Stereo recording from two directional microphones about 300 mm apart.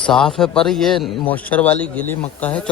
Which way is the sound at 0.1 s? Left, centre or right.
Centre.